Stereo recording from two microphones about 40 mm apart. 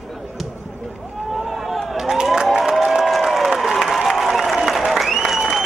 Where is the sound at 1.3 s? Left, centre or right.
Centre.